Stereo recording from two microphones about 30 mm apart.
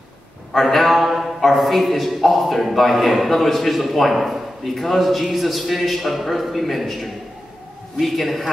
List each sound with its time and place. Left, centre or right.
0.5 s a man's voice: centre